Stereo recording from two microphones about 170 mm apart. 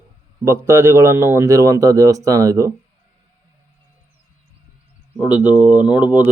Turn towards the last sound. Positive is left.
turn(degrees=-10)  # may be behind; listen again after turning